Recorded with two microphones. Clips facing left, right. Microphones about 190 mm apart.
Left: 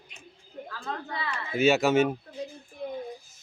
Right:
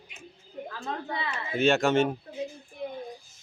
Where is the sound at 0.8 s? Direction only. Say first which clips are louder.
Right 1 dB; 20° right (ahead or behind).